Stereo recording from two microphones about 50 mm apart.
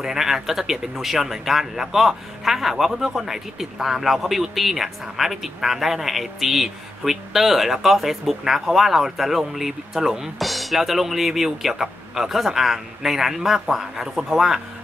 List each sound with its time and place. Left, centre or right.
0.0 s speech: centre